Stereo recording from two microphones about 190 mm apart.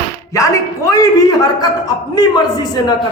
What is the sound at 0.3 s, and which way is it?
A man's voice, 15° left (ahead or behind).